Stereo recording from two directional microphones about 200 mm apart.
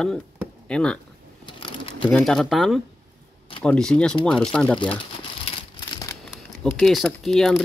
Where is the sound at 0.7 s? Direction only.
5° left (ahead or behind).